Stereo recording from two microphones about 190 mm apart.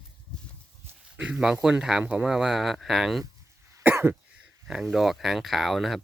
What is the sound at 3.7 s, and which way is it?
Cough, 15° right (ahead or behind).